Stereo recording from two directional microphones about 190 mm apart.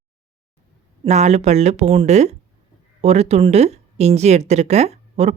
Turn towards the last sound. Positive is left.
turn(degrees=-35)  # may be behind; listen again after turning